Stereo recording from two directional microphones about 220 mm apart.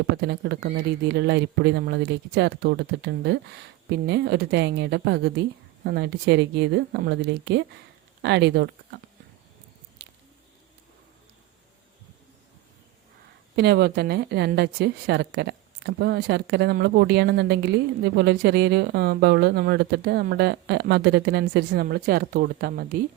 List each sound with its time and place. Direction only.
0.2 s a woman's voice: 50° right (ahead or behind)
13.6 s a woman's voice: 45° right (ahead or behind)